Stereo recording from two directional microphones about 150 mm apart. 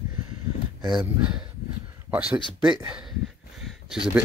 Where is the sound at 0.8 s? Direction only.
5° right (ahead or behind).